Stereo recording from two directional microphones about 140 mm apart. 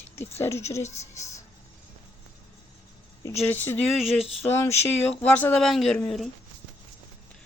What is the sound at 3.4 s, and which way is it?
Speech, 15° left (ahead or behind).